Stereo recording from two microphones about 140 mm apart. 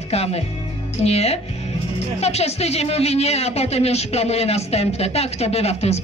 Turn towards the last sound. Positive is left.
turn(degrees=50)  # may be behind; listen again after turning